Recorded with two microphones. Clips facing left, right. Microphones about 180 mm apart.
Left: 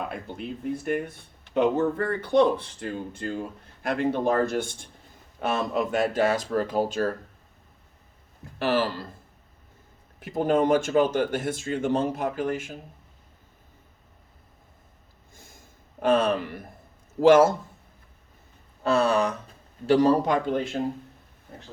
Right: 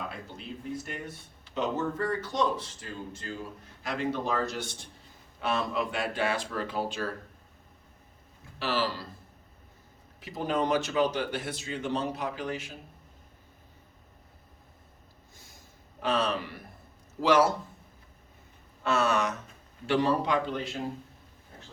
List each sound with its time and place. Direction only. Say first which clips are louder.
0.1 s a man's voice: left 7 dB; 55° left (ahead or behind)
8.5 s a man's voice: left 6 dB; 50° left (ahead or behind)
10.2 s a man's voice: left 7 dB; 50° left (ahead or behind)
16.0 s a man's voice: left 7 dB; 50° left (ahead or behind)
18.8 s a man's voice: left 5 dB; 35° left (ahead or behind); by 20.8 s 50° left (ahead or behind)